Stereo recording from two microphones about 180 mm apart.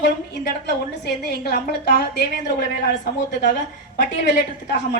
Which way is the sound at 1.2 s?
65° left (ahead or behind).